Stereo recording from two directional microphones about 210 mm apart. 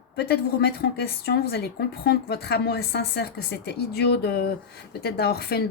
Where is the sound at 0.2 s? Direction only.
50° left (ahead or behind).